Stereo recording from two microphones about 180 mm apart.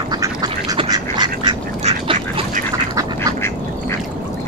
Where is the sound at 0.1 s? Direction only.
20° right (ahead or behind).